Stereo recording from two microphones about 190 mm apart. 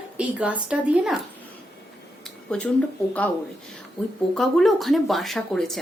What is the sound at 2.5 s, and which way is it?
Speech, 5° left (ahead or behind).